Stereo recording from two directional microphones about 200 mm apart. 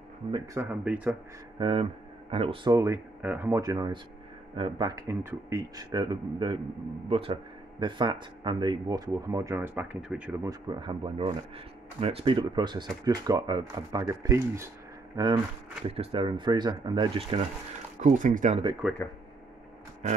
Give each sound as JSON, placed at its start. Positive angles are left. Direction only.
{"t": 0.6, "sound": "speech", "side_deg": -5}
{"t": 1.6, "sound": "speech", "side_deg": -25}
{"t": 18.0, "sound": "speech", "side_deg": -40}
{"t": 18.8, "sound": "speech", "side_deg": 0}